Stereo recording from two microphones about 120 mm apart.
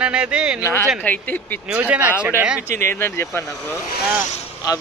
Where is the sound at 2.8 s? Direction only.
20° left (ahead or behind).